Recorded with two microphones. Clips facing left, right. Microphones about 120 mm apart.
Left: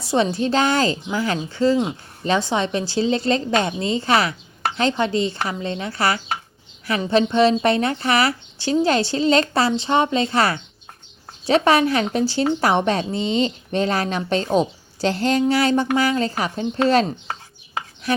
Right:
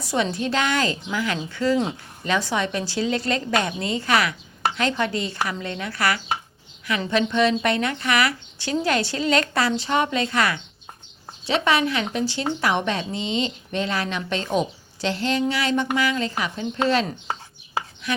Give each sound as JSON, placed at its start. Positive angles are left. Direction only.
{"t": 0.0, "sound": "speech", "side_deg": 30}
{"t": 18.0, "sound": "speech", "side_deg": 40}